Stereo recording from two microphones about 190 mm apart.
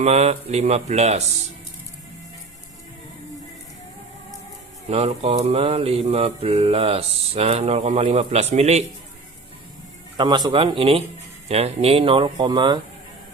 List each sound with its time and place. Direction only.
0.0 s mantra: 35° right (ahead or behind)
4.9 s mantra: 35° right (ahead or behind)
10.2 s speech: 25° right (ahead or behind)